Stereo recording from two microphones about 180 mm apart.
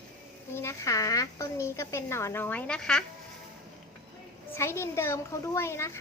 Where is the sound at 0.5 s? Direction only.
15° left (ahead or behind).